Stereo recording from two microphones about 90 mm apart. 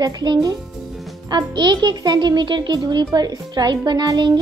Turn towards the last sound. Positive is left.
turn(degrees=-50)  # may be behind; listen again after turning